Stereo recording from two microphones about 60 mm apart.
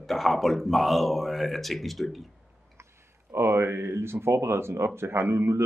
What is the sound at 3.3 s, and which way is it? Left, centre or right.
Speech, right.